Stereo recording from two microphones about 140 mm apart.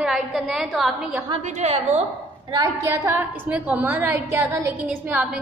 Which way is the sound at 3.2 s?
10° right (ahead or behind).